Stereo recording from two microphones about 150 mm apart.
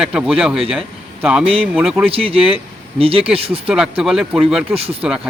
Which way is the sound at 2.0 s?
40° right (ahead or behind).